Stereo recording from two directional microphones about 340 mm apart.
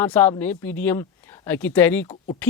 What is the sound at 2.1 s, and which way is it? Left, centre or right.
Speech, centre.